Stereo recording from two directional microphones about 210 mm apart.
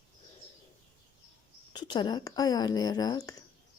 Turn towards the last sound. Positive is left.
turn(degrees=20)  # may be behind; listen again after turning